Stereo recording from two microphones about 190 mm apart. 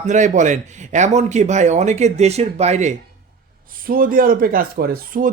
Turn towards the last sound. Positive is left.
turn(degrees=-50)  # may be behind; listen again after turning